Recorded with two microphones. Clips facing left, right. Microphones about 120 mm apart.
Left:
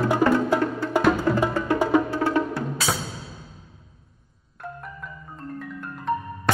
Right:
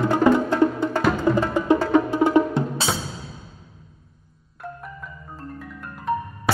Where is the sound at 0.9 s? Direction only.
15° left (ahead or behind).